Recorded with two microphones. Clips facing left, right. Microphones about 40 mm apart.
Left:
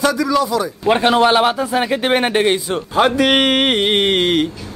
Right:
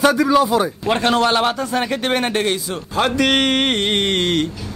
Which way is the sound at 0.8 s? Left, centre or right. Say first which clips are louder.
Left 7 dB; centre.